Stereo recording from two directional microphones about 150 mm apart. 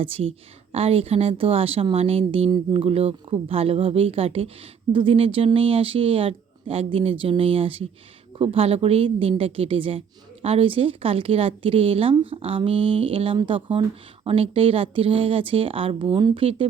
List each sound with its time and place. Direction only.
0.0 s a woman's voice: 40° right (ahead or behind)